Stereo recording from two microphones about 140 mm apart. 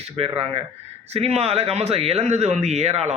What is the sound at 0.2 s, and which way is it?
Speech, 45° right (ahead or behind).